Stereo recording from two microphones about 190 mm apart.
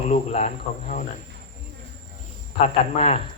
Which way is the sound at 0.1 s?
35° left (ahead or behind).